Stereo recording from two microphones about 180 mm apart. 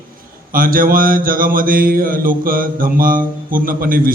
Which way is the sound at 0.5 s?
50° right (ahead or behind).